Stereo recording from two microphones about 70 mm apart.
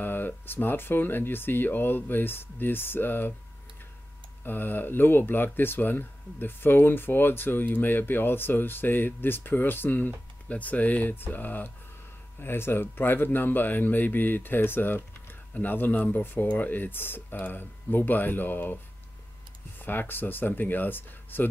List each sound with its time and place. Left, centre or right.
0.0 s speech: left
4.5 s speech: left
19.8 s speech: left